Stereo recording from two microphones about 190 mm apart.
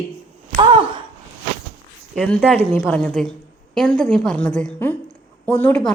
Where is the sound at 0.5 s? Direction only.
25° right (ahead or behind).